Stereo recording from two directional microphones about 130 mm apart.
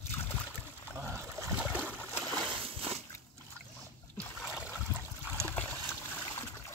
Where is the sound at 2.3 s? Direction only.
40° right (ahead or behind).